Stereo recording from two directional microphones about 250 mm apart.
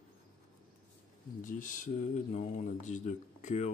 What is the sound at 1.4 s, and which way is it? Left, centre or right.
Speech, left.